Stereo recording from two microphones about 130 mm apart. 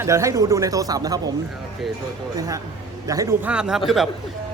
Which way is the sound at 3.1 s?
25° right (ahead or behind).